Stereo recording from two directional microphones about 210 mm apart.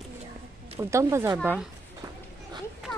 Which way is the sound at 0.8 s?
15° right (ahead or behind).